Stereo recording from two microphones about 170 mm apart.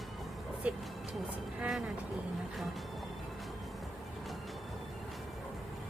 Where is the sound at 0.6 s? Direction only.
5° right (ahead or behind).